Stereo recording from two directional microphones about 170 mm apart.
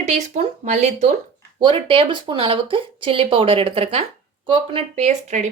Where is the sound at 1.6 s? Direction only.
30° right (ahead or behind).